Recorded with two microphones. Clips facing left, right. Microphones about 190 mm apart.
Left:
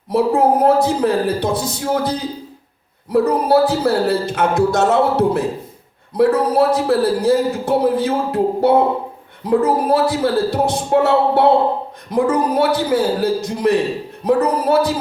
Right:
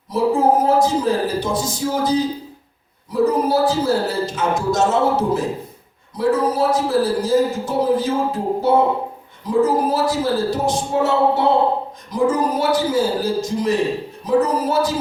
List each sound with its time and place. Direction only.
0.1 s speech: 60° left (ahead or behind)